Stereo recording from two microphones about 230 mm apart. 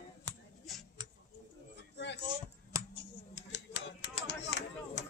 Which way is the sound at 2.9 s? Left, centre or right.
Left.